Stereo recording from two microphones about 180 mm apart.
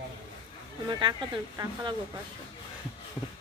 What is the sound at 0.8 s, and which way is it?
Speech, 25° right (ahead or behind).